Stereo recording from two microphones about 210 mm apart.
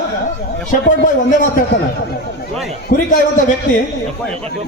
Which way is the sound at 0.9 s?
40° left (ahead or behind).